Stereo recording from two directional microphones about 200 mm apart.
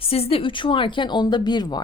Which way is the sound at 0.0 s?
30° left (ahead or behind).